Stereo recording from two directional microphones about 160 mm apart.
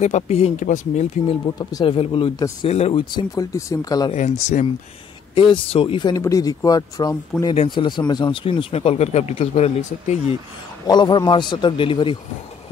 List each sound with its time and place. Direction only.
0.0 s speech: 45° left (ahead or behind)
1.6 s speech: 25° left (ahead or behind)
3.1 s speech: 25° left (ahead or behind)
4.1 s speech: 45° left (ahead or behind)
5.3 s speech: 35° left (ahead or behind)
10.9 s speech: 25° left (ahead or behind)